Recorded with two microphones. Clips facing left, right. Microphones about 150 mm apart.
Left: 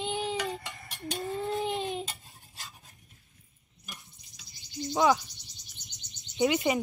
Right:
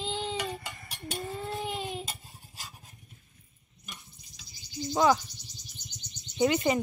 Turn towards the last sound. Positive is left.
turn(degrees=0)  # may be behind; listen again after turning